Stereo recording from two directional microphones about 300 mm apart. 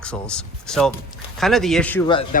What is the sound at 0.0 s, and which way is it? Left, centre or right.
Speech, centre.